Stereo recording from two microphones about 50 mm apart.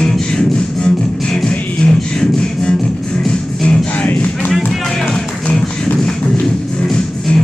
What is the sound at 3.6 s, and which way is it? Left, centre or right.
Music, centre.